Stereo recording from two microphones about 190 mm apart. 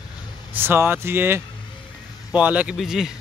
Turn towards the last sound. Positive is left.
turn(degrees=0)  # may be behind; listen again after turning